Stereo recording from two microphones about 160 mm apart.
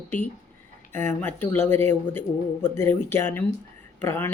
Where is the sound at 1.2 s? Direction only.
15° left (ahead or behind).